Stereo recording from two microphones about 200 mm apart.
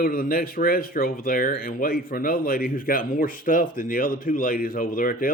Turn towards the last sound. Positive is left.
turn(degrees=45)  # may be behind; listen again after turning